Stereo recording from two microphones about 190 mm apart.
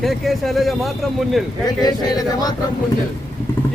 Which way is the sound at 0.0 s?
Centre (ahead or behind).